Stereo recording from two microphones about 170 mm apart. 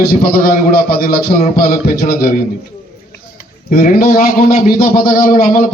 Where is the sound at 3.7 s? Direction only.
60° left (ahead or behind).